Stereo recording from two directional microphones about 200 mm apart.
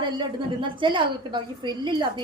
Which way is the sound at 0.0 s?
25° right (ahead or behind).